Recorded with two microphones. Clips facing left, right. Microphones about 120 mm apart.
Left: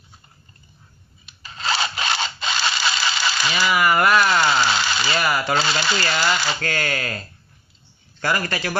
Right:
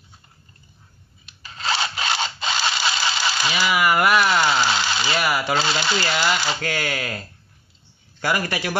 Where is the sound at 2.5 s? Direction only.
15° right (ahead or behind).